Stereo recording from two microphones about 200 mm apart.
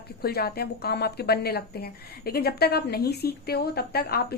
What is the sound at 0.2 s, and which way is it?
A woman's voice, 50° left (ahead or behind).